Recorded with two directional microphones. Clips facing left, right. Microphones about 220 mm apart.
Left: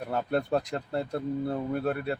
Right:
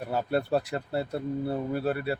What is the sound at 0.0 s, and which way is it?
Speech, 5° right (ahead or behind).